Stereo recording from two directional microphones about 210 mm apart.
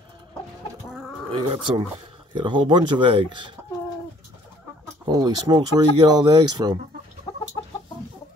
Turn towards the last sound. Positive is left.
turn(degrees=25)  # may be behind; listen again after turning